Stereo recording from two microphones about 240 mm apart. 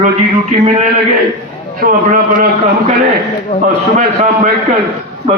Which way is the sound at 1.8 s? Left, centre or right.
Right.